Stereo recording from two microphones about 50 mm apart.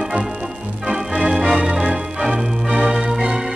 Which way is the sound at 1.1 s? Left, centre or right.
Right.